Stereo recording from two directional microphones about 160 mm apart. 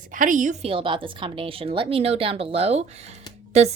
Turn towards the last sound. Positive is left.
turn(degrees=-45)  # may be behind; listen again after turning